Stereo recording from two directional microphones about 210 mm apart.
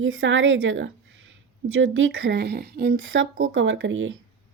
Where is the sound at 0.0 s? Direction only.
70° right (ahead or behind).